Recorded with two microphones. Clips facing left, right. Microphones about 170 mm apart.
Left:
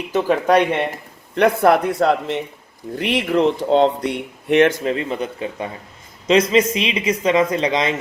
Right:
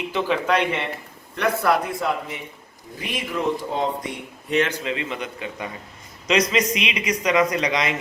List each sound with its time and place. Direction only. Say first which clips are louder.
0.1 s speech: left 7 dB; 45° left (ahead or behind); by 4.7 s 60° left (ahead or behind)
4.8 s speech: left 6 dB; 40° left (ahead or behind)